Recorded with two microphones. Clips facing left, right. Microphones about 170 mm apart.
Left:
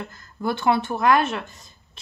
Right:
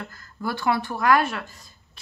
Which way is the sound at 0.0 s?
20° left (ahead or behind).